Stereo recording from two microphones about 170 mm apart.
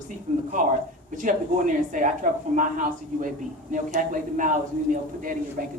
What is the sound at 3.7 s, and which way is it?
Speech, 50° right (ahead or behind).